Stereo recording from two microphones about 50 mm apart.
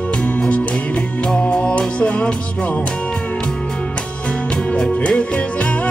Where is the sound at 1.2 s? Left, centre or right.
Centre.